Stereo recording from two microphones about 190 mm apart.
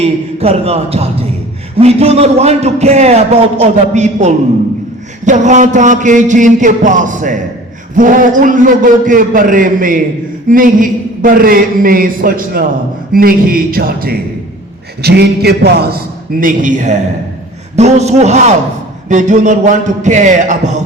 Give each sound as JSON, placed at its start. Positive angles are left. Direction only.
{"t": 0.0, "sound": "a man's voice", "side_deg": -30}
{"t": 16.4, "sound": "a man's voice", "side_deg": -45}